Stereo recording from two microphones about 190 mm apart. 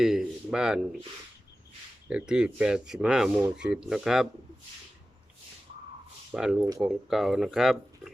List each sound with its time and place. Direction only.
0.0 s a sound: 5° right (ahead or behind)
2.0 s speech: 5° right (ahead or behind)
6.3 s speech: 5° right (ahead or behind)